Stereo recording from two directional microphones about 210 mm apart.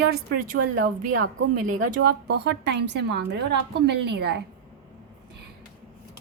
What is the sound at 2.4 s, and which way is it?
A woman's voice, 55° right (ahead or behind).